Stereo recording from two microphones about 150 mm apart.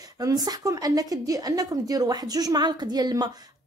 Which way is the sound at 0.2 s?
25° right (ahead or behind).